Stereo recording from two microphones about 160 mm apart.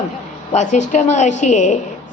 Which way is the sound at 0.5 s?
50° left (ahead or behind).